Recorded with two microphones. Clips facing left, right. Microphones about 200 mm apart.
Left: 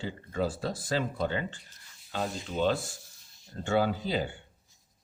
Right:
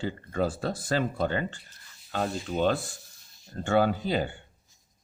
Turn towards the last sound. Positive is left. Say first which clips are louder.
# right 3 dB
turn(degrees=-55)  # may be behind; listen again after turning